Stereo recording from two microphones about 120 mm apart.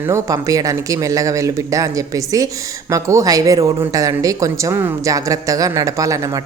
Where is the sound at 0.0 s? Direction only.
25° right (ahead or behind).